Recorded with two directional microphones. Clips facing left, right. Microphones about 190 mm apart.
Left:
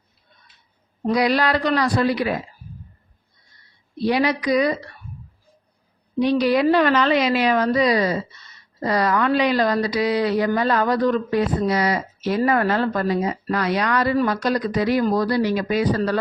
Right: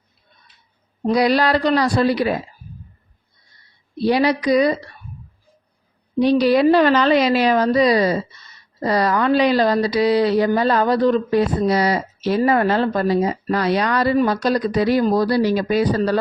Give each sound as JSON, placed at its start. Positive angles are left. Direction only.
{"t": 1.0, "sound": "speech", "side_deg": -30}
{"t": 3.9, "sound": "speech", "side_deg": -35}
{"t": 6.1, "sound": "speech", "side_deg": -35}